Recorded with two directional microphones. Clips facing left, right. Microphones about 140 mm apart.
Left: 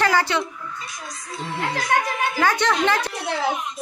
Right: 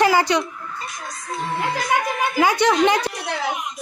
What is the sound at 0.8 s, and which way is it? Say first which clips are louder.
Speech: right 4 dB; 50° right (ahead or behind).